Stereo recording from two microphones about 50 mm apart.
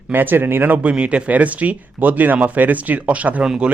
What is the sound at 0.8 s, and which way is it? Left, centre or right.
Speech, right.